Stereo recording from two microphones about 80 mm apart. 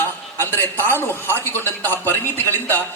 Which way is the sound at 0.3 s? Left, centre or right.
Left.